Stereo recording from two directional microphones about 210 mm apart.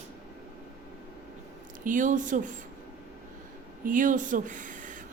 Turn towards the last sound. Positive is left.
turn(degrees=-35)  # may be behind; listen again after turning